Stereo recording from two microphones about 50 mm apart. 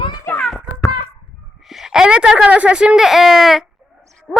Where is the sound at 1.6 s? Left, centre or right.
Centre.